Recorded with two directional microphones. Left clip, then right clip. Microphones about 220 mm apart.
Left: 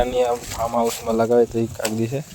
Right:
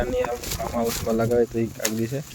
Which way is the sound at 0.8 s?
10° left (ahead or behind).